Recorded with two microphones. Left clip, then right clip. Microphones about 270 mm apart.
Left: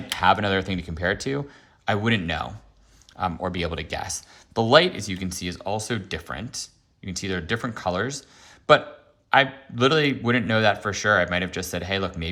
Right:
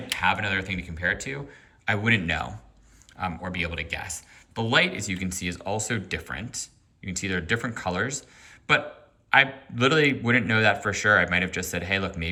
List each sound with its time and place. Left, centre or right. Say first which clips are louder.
0.1 s speech: left 4 dB; centre